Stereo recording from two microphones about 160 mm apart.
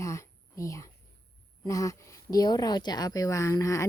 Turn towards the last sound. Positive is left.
turn(degrees=20)  # may be behind; listen again after turning